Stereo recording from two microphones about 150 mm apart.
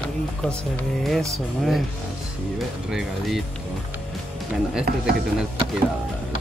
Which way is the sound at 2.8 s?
5° right (ahead or behind).